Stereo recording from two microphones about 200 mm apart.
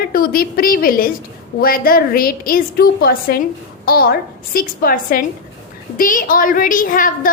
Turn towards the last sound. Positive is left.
turn(degrees=40)  # may be behind; listen again after turning